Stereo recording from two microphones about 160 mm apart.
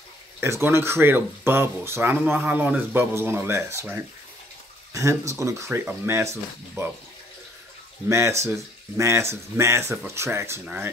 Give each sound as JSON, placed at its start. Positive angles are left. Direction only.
{"t": 0.4, "sound": "speech", "side_deg": -15}
{"t": 8.1, "sound": "speech", "side_deg": -15}